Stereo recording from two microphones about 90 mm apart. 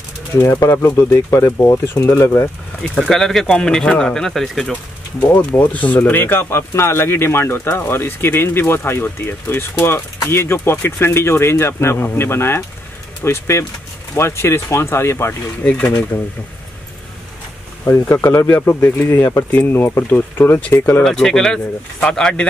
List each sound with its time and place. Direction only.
0.4 s speech: 35° left (ahead or behind)
2.8 s speech: 5° left (ahead or behind)
5.2 s speech: 20° left (ahead or behind)
15.6 s speech: 15° left (ahead or behind)
17.8 s speech: 30° left (ahead or behind)
21.0 s speech: 5° left (ahead or behind)